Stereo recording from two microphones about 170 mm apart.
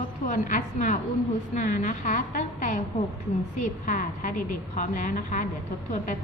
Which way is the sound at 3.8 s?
50° left (ahead or behind).